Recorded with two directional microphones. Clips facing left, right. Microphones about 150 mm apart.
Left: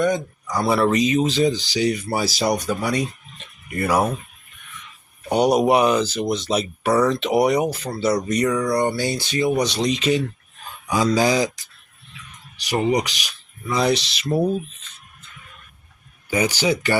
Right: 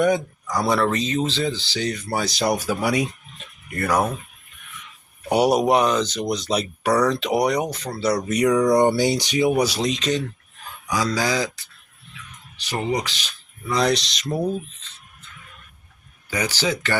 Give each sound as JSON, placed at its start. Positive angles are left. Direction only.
{"t": 0.4, "sound": "speech", "side_deg": 0}
{"t": 3.7, "sound": "speech", "side_deg": 5}
{"t": 5.3, "sound": "speech", "side_deg": -5}
{"t": 10.8, "sound": "speech", "side_deg": 20}
{"t": 13.7, "sound": "speech", "side_deg": 0}
{"t": 16.3, "sound": "speech", "side_deg": 20}